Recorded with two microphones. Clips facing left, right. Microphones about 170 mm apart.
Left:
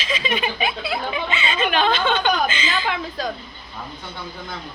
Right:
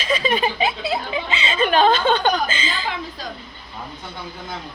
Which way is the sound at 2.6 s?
30° right (ahead or behind).